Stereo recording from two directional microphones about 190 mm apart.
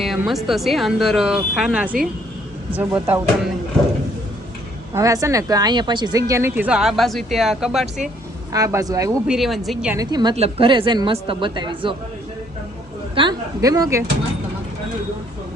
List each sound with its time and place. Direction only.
0.2 s a woman's voice: centre (ahead or behind)
4.9 s a woman's voice: 15° right (ahead or behind); by 7.9 s centre (ahead or behind)
8.5 s a woman's voice: 15° right (ahead or behind)
9.2 s speech: centre (ahead or behind)
9.9 s speech: 20° right (ahead or behind)
13.1 s speech: 20° right (ahead or behind)